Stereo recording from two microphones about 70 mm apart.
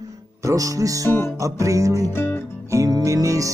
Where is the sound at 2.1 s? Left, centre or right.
Left.